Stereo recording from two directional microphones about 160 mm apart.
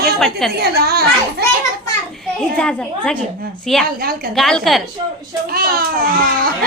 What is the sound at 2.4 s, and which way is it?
A woman's voice, 5° left (ahead or behind).